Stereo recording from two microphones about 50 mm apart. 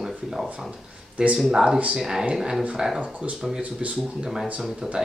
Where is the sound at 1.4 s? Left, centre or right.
Centre.